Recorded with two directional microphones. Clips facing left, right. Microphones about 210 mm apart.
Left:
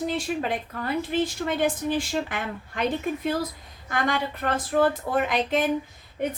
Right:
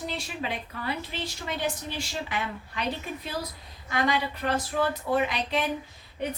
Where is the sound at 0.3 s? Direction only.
50° left (ahead or behind).